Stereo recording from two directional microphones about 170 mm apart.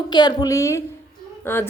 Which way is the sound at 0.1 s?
25° left (ahead or behind).